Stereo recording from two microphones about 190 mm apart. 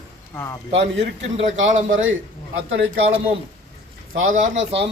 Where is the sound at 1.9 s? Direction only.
90° right.